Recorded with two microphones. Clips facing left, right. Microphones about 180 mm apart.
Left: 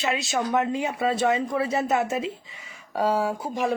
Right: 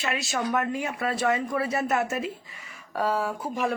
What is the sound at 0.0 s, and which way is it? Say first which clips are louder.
Speech: left 3 dB; 20° left (ahead or behind).